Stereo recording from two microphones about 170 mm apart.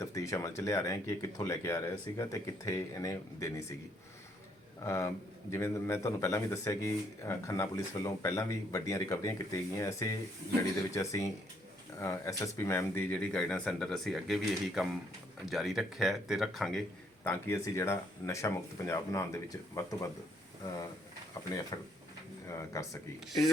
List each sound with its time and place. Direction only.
0.0 s a man's voice: 20° left (ahead or behind)
4.8 s a man's voice: 15° left (ahead or behind); by 16.8 s centre (ahead or behind)
17.2 s a man's voice: 15° left (ahead or behind)
21.4 s a man's voice: 20° left (ahead or behind)